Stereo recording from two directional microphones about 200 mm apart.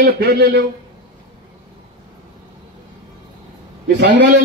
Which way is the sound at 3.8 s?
60° right (ahead or behind).